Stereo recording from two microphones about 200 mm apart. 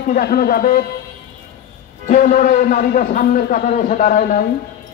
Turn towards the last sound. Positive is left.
turn(degrees=40)  # may be behind; listen again after turning